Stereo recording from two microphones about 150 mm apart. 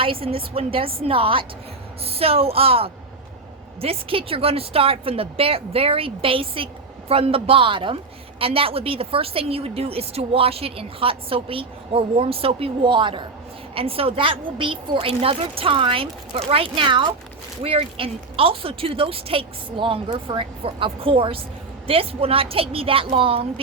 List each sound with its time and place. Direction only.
0.0 s a woman's voice: 35° right (ahead or behind)